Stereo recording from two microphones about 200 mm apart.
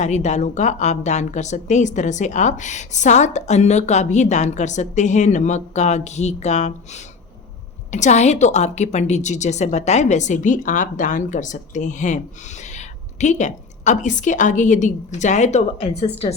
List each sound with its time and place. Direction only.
0.0 s a woman's voice: 35° left (ahead or behind)